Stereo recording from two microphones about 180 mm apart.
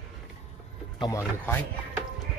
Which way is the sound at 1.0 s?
15° left (ahead or behind).